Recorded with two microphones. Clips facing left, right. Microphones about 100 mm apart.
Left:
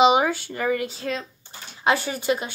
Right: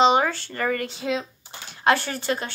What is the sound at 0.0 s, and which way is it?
A woman's voice, 10° left (ahead or behind).